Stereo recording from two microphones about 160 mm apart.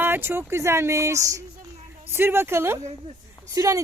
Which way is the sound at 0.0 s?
15° right (ahead or behind).